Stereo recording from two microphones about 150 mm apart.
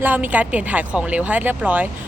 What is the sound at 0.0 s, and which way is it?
Speech, 10° right (ahead or behind).